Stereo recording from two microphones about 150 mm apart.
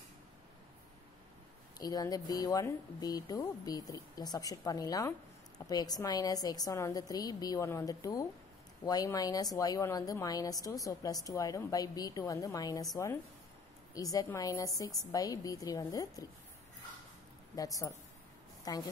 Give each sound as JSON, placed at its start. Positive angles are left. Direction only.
{"t": 1.8, "sound": "a woman's voice", "side_deg": 25}
{"t": 17.6, "sound": "a woman's voice", "side_deg": 20}